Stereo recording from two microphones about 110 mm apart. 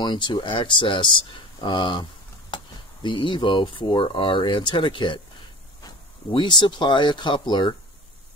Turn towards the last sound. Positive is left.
turn(degrees=45)  # may be behind; listen again after turning